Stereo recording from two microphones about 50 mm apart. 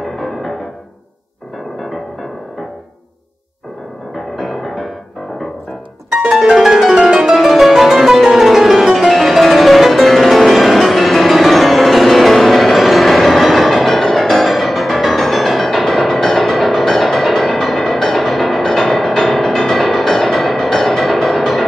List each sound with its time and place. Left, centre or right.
0.0 s music: centre
4.1 s music: centre
6.0 s harp: centre